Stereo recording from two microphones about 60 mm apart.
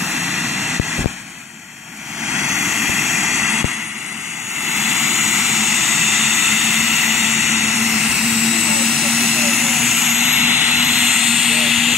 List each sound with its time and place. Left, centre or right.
0.2 s vehicle: centre
2.2 s vehicle: centre
4.7 s vehicle: centre
10.4 s vehicle: right
10.8 s vehicle: centre